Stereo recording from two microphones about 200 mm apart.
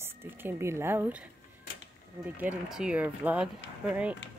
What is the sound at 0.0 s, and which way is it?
Speech, 10° right (ahead or behind).